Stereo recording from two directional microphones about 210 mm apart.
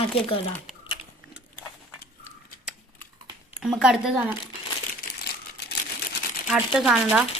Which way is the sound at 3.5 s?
5° right (ahead or behind).